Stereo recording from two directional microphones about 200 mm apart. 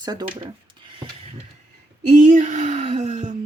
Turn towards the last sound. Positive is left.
turn(degrees=-35)  # may be behind; listen again after turning